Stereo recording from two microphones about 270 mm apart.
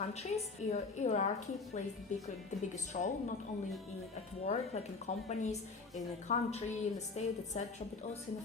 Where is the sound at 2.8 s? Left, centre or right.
Left.